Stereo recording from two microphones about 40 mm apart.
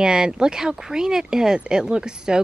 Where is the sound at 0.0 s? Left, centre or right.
Centre.